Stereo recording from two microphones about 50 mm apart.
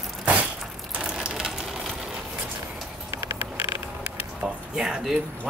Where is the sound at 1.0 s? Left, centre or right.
Centre.